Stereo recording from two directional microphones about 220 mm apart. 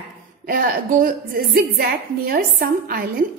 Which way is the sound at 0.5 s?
40° right (ahead or behind).